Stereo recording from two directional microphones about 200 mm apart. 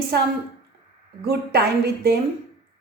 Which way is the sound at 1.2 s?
55° right (ahead or behind).